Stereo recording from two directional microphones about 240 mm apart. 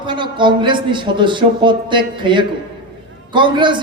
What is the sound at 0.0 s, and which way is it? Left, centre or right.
A man's voice, centre.